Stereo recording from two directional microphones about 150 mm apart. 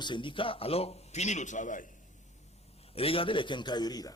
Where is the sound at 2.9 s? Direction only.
40° left (ahead or behind).